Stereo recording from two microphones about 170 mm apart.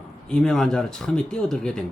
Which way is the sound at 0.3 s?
5° left (ahead or behind).